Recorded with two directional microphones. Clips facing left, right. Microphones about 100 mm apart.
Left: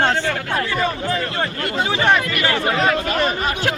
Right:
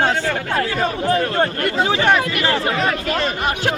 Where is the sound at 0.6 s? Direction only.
40° right (ahead or behind).